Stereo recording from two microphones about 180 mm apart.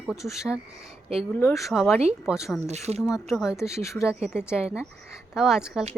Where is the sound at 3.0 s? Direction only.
Centre (ahead or behind).